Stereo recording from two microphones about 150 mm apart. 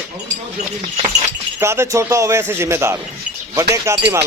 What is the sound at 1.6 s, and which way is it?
A man's voice, 20° right (ahead or behind).